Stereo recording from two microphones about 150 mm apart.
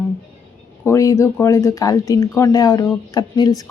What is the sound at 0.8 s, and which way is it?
Speech, 20° left (ahead or behind).